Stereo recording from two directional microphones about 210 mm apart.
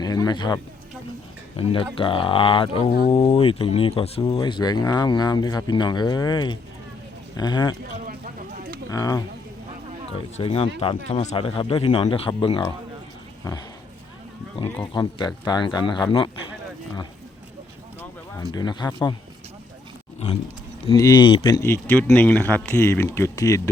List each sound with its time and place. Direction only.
0.0 s speech: 20° left (ahead or behind)
7.9 s a sound: 40° right (ahead or behind)
8.9 s speech: 15° left (ahead or behind)
10.1 s speech: 30° left (ahead or behind)
15.4 s speech: 20° left (ahead or behind)
18.5 s speech: 20° left (ahead or behind)
20.1 s roaring cats: 30° left (ahead or behind)
20.8 s speech: 15° left (ahead or behind)